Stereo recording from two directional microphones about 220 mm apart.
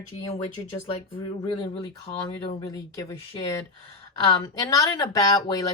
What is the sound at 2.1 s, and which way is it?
Speech, 15° left (ahead or behind).